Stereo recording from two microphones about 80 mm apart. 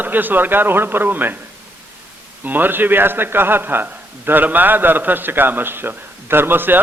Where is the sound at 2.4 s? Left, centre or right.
Right.